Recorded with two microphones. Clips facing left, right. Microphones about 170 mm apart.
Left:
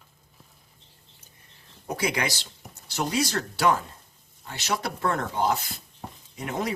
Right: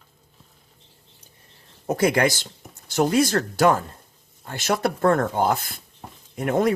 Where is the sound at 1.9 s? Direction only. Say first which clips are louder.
Right 8 dB; 50° right (ahead or behind).